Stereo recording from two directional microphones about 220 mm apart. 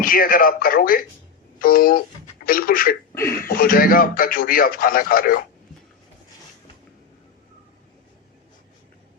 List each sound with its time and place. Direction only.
0.0 s a man's voice: 40° left (ahead or behind)